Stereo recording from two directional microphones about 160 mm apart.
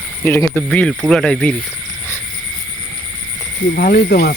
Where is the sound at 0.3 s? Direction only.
15° left (ahead or behind).